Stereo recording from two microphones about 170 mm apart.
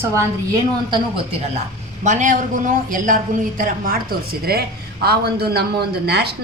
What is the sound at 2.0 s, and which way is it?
A woman's voice, 45° right (ahead or behind).